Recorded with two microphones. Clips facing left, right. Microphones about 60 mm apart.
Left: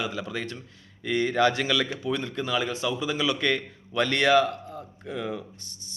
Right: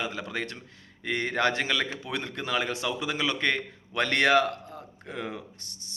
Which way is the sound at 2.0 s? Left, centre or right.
Right.